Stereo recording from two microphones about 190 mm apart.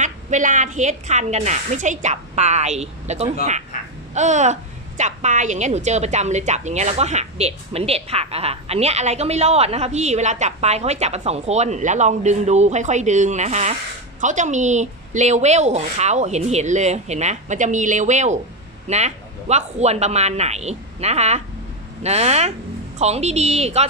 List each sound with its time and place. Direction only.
0.0 s a woman's voice: 40° right (ahead or behind)